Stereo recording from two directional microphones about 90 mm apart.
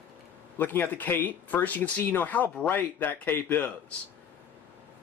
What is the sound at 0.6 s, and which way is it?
Speech, 20° left (ahead or behind).